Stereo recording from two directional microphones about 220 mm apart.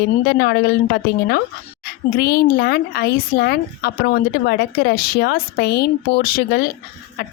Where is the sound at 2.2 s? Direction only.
45° left (ahead or behind).